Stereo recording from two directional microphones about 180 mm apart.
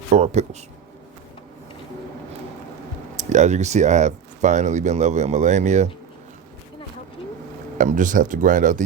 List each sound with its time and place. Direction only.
0.1 s speech: 35° right (ahead or behind)
3.2 s speech: 40° right (ahead or behind)
7.8 s speech: 45° right (ahead or behind)